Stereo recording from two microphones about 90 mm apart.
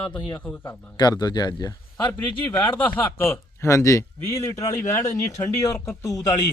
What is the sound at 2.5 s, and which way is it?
Speech, 25° left (ahead or behind).